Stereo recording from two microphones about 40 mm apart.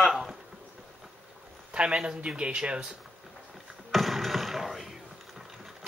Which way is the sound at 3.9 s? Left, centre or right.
Centre.